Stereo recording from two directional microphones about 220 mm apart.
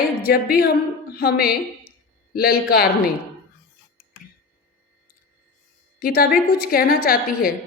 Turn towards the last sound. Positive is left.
turn(degrees=40)  # may be behind; listen again after turning